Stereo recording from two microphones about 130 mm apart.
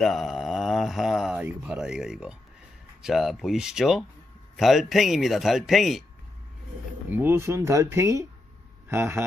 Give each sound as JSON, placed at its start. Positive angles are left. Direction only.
{"t": 0.0, "sound": "mantra", "side_deg": 0}
{"t": 1.4, "sound": "speech", "side_deg": -10}
{"t": 7.1, "sound": "a man's voice", "side_deg": -15}